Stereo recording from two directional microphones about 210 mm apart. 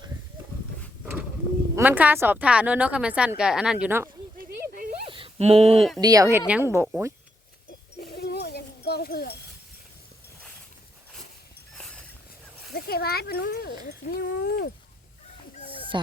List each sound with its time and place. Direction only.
1.7 s a woman's voice: 10° right (ahead or behind)
4.4 s a sound: 40° right (ahead or behind)
5.0 s a sound: 25° right (ahead or behind)
5.7 s speech: centre (ahead or behind)
6.0 s a woman's voice: 15° right (ahead or behind)
8.0 s goat: 50° left (ahead or behind)
12.7 s a child's voice: 45° left (ahead or behind)